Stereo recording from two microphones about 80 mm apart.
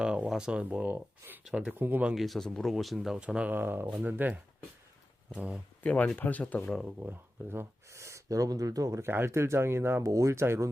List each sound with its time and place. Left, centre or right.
0.0 s speech: centre
1.2 s speech: right
1.5 s speech: right
2.1 s speech: centre
3.2 s speech: centre
5.3 s speech: centre
5.8 s speech: centre
6.8 s speech: right
10.1 s speech: right